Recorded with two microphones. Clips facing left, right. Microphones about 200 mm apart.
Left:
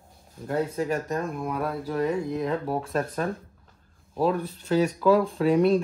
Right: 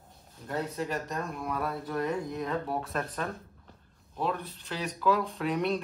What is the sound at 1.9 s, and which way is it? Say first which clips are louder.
Speech: left 6 dB; 30° left (ahead or behind).